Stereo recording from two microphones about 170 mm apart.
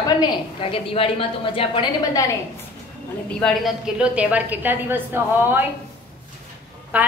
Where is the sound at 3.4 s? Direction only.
5° right (ahead or behind).